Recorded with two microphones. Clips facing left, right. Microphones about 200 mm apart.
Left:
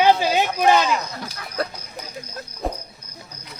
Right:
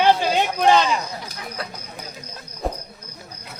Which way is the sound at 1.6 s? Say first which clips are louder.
Left 8 dB; 40° left (ahead or behind).